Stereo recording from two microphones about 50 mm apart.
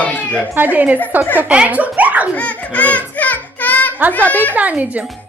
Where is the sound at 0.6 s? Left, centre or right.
Right.